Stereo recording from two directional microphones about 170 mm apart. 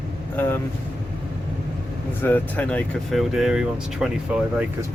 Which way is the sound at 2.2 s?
10° left (ahead or behind).